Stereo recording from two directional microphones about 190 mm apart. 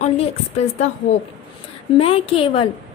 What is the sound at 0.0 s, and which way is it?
Speech, 35° left (ahead or behind).